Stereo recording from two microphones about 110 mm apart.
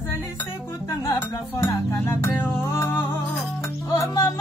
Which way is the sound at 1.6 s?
25° left (ahead or behind).